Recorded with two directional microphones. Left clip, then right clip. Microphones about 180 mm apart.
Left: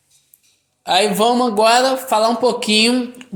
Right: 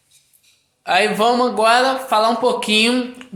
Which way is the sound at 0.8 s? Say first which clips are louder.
Left 1 dB; 35° left (ahead or behind).